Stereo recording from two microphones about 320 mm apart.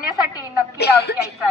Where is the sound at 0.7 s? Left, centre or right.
Left.